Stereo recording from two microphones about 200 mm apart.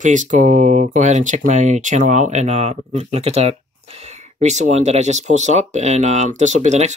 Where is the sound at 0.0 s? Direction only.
40° right (ahead or behind).